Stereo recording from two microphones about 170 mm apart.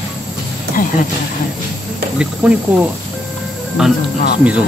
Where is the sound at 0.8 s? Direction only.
55° left (ahead or behind).